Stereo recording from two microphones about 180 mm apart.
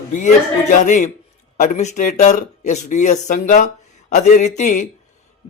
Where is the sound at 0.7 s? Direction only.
45° left (ahead or behind).